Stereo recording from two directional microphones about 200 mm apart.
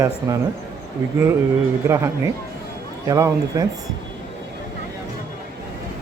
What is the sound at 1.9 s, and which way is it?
Speech, 15° right (ahead or behind).